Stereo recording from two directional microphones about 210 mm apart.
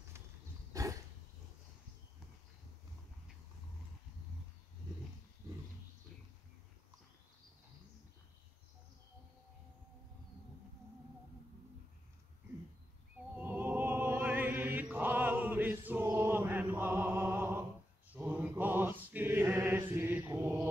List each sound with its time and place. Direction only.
0.7 s a sound: 15° right (ahead or behind)
13.4 s opera: 10° right (ahead or behind)
18.1 s choir: 10° right (ahead or behind)